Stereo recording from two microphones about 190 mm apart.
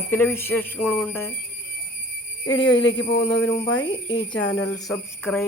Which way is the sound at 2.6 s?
75° left (ahead or behind).